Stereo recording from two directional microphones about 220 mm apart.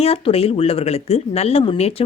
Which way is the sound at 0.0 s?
25° left (ahead or behind).